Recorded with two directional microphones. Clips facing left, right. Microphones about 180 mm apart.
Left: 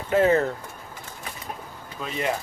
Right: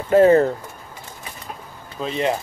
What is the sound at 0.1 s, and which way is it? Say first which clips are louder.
Speech: right 7 dB; 40° right (ahead or behind).